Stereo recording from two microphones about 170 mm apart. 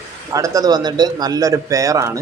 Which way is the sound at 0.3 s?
20° right (ahead or behind).